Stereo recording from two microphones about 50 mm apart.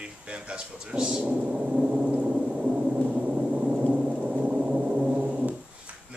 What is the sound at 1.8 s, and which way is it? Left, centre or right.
Gong, right.